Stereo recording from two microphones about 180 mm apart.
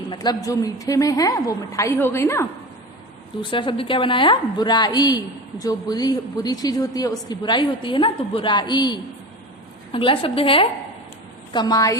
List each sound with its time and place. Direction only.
0.1 s a woman's voice: 25° left (ahead or behind)
3.5 s a woman's voice: 25° left (ahead or behind)